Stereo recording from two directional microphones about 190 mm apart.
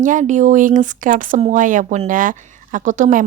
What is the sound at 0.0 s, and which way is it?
A woman's voice, 40° right (ahead or behind).